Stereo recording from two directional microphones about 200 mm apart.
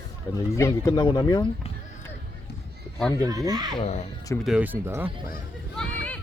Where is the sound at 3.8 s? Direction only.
35° left (ahead or behind).